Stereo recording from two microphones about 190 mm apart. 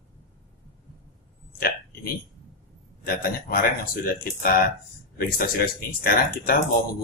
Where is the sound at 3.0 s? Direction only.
50° left (ahead or behind).